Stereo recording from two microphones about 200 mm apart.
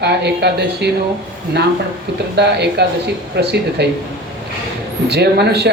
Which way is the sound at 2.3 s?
55° right (ahead or behind).